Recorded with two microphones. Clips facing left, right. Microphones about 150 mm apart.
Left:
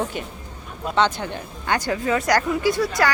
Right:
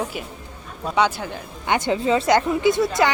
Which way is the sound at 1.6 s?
20° right (ahead or behind).